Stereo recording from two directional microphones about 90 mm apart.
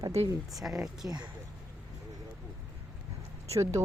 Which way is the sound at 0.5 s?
Centre (ahead or behind).